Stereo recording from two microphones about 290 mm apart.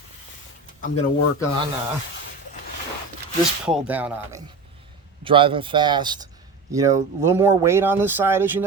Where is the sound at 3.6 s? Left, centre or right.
Centre.